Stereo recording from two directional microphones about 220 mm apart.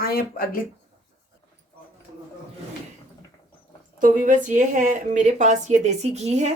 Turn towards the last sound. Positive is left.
turn(degrees=-30)  # may be behind; listen again after turning